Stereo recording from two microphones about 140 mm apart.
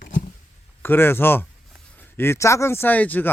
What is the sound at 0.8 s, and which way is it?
Speech, 15° left (ahead or behind).